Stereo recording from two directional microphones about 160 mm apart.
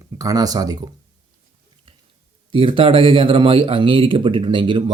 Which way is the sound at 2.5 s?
35° right (ahead or behind).